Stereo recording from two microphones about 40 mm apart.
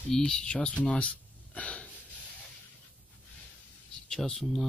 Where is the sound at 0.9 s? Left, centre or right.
Left.